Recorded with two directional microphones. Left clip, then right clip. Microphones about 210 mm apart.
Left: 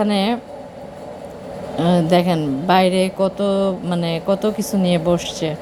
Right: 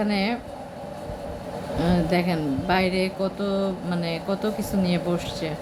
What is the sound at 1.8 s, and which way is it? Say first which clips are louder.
Speech: left 8 dB; 35° left (ahead or behind).